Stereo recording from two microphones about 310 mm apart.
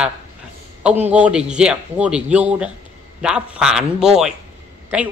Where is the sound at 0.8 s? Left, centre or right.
Centre.